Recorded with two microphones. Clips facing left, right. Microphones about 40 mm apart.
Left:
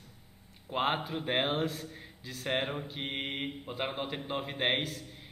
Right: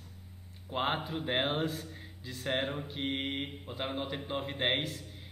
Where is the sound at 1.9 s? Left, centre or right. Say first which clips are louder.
Even; centre.